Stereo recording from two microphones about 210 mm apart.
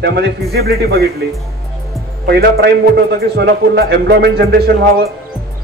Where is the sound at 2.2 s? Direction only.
50° right (ahead or behind).